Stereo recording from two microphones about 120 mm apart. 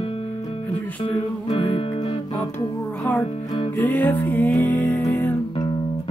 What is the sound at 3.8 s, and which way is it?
Music, 15° left (ahead or behind).